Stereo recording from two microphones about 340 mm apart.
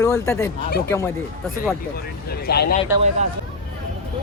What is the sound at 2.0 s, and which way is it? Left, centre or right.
Speech, left.